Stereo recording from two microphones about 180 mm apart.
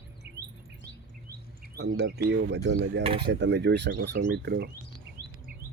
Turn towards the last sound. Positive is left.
turn(degrees=-65)  # may be behind; listen again after turning